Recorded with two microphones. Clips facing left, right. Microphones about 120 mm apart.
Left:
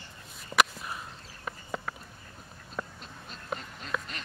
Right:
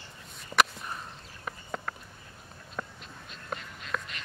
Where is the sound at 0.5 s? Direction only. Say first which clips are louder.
Even; 5° left (ahead or behind).